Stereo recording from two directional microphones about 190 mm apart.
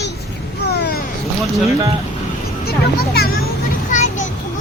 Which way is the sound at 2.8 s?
55° left (ahead or behind).